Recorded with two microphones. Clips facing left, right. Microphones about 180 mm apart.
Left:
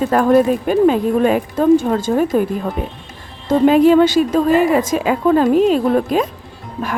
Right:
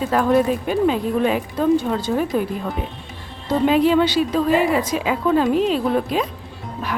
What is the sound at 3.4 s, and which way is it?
A woman's voice, 45° left (ahead or behind).